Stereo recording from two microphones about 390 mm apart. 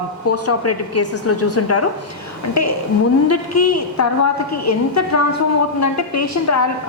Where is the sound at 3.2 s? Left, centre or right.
Left.